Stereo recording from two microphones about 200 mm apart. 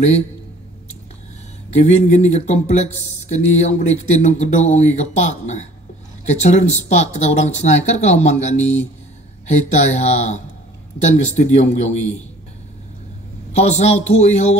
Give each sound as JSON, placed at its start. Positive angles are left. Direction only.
{"t": 1.7, "sound": "speech", "side_deg": 35}
{"t": 13.6, "sound": "speech", "side_deg": 35}